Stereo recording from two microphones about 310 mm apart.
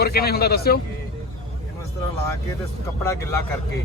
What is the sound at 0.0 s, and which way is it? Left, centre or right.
Speech, left.